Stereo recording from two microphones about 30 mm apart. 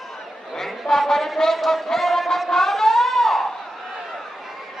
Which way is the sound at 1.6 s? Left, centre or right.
Centre.